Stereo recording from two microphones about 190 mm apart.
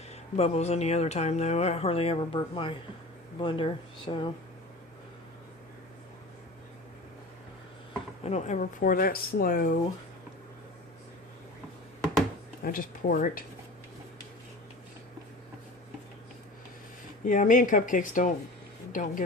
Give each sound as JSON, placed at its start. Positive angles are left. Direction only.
{"t": 0.3, "sound": "speech", "side_deg": 35}
{"t": 8.2, "sound": "speech", "side_deg": 35}
{"t": 12.6, "sound": "speech", "side_deg": 45}
{"t": 17.2, "sound": "speech", "side_deg": 45}